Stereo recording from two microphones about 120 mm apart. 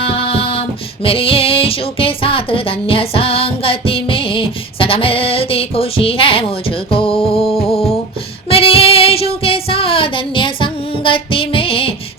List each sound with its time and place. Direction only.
0.0 s female singing: 50° left (ahead or behind)
1.0 s music: 50° left (ahead or behind)
8.4 s child singing: 50° left (ahead or behind)